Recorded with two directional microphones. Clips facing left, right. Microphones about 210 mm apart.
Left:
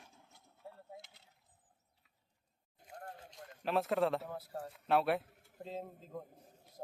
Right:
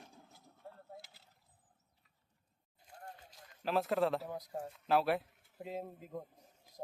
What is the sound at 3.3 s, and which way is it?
Speech, centre (ahead or behind).